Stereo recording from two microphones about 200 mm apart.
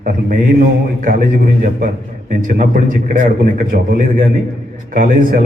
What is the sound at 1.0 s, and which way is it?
A man's voice, 40° right (ahead or behind).